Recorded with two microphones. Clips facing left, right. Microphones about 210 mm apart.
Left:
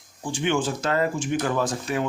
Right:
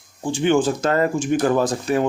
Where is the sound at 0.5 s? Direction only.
45° right (ahead or behind).